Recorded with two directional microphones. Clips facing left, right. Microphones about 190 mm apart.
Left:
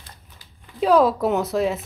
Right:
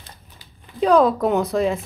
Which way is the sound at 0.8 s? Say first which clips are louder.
Right 1 dB; 5° left (ahead or behind).